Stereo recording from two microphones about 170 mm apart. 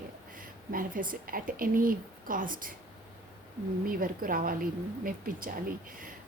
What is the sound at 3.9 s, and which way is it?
A woman's voice, 55° right (ahead or behind).